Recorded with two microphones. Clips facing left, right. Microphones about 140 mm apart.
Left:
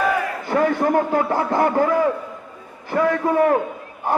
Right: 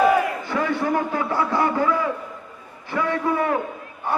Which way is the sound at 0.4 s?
45° left (ahead or behind).